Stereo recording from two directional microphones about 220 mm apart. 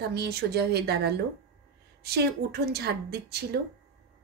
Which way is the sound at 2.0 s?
45° right (ahead or behind).